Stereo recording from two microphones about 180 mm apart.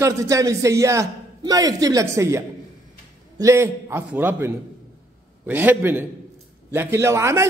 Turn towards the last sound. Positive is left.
turn(degrees=-15)  # may be behind; listen again after turning